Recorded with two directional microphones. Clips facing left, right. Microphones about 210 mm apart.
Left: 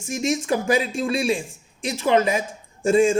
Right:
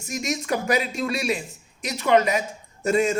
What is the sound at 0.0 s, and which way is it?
Speech, 25° left (ahead or behind).